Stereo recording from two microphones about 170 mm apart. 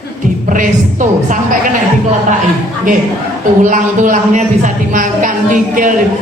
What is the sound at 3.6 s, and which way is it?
Speech, 50° right (ahead or behind).